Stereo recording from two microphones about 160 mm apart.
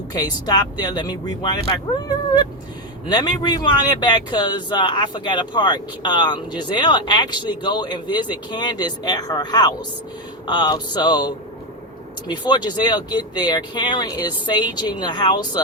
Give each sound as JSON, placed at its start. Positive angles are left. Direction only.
{"t": 0.1, "sound": "speech", "side_deg": 25}